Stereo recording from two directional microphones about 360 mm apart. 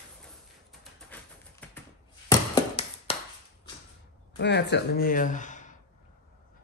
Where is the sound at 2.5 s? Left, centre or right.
Centre.